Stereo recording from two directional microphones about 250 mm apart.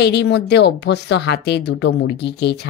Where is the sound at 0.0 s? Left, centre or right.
Left.